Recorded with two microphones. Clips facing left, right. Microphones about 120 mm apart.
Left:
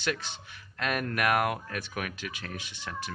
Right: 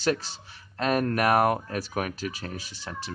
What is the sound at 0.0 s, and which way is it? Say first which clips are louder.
Speech: right 6 dB; 35° right (ahead or behind).